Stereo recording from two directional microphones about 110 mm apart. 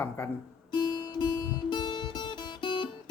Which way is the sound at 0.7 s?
45° left (ahead or behind).